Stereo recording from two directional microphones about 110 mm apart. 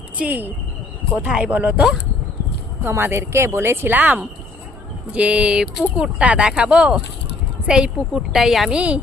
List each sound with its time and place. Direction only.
0.2 s a woman's voice: 15° right (ahead or behind)
2.8 s a woman's voice: 20° right (ahead or behind)